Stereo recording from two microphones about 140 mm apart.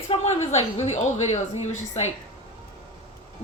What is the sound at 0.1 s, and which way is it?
A woman's voice, 50° left (ahead or behind).